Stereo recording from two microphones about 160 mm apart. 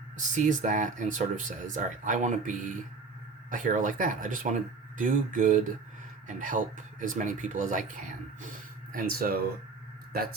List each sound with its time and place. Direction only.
0.2 s speech: 50° right (ahead or behind)
8.9 s speech: 60° right (ahead or behind)